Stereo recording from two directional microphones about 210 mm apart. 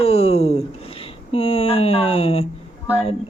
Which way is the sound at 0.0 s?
30° left (ahead or behind).